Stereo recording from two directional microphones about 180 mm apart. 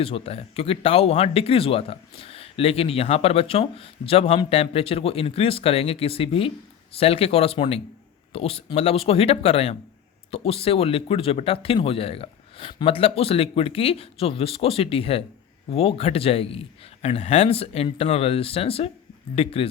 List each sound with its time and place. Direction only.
0.0 s speech: 35° left (ahead or behind)